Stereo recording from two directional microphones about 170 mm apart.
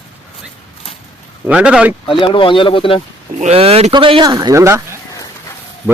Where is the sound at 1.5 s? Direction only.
5° right (ahead or behind).